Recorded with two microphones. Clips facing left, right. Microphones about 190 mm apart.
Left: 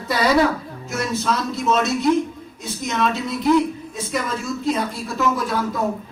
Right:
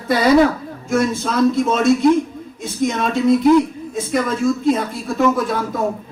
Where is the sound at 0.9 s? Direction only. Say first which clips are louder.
Right 5 dB; 50° right (ahead or behind).